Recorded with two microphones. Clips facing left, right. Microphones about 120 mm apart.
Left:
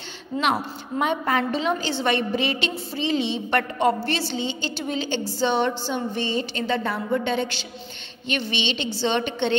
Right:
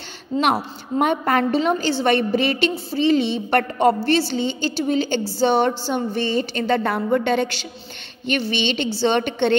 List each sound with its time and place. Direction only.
0.4 s a woman's voice: 50° right (ahead or behind)